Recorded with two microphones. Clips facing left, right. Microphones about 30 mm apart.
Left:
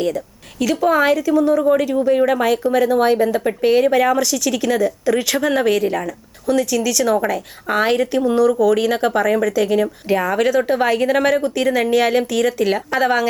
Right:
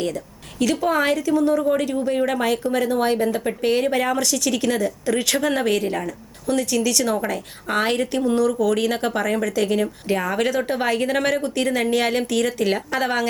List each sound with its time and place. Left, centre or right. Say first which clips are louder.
0.6 s speech: left 4 dB; centre